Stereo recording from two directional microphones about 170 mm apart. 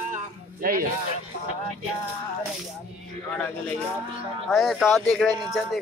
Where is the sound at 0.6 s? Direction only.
55° right (ahead or behind).